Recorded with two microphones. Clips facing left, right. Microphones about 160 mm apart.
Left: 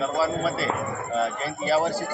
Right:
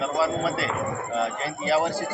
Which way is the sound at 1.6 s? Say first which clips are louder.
Even; 15° right (ahead or behind).